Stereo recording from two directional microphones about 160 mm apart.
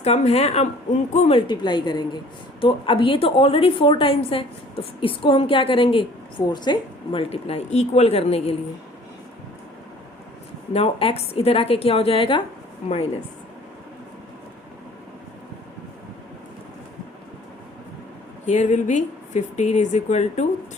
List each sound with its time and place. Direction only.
0.0 s speech: 40° left (ahead or behind)
1.4 s a woman's voice: 30° left (ahead or behind)
10.7 s a woman's voice: 35° left (ahead or behind)
18.4 s speech: 50° left (ahead or behind)